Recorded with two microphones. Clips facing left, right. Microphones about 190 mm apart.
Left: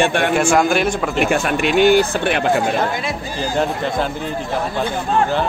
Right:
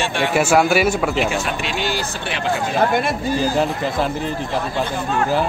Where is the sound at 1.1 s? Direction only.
55° left (ahead or behind).